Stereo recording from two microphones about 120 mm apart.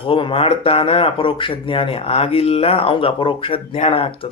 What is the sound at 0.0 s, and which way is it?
Speech, 50° left (ahead or behind).